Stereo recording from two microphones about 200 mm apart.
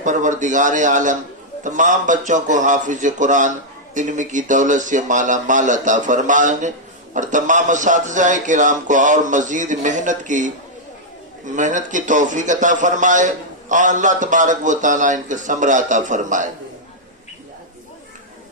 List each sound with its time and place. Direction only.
0.0 s speech: 40° right (ahead or behind)